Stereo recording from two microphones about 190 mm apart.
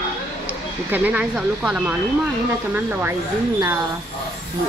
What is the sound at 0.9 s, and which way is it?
Speech, 10° right (ahead or behind).